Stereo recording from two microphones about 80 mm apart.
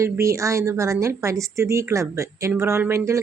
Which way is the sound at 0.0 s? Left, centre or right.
Right.